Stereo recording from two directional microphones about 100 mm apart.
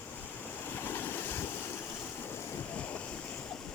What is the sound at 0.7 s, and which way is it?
Waves, 20° left (ahead or behind).